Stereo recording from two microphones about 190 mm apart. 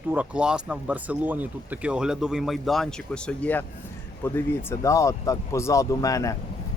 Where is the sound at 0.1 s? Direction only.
5° right (ahead or behind).